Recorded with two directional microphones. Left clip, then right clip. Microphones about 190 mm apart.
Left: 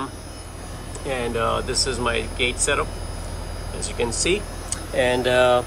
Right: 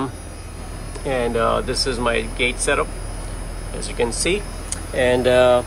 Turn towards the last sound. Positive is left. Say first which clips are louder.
# right 3 dB
turn(degrees=15)  # may be behind; listen again after turning